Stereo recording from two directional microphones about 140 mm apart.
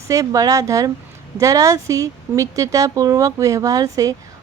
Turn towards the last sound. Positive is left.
turn(degrees=-25)  # may be behind; listen again after turning